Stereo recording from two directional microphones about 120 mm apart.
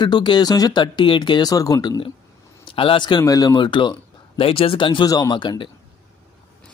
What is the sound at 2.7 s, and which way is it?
Speech, 45° left (ahead or behind).